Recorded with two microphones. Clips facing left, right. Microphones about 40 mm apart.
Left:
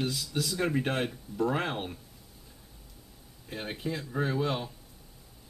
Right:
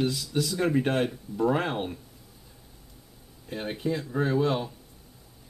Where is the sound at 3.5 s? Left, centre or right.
Centre.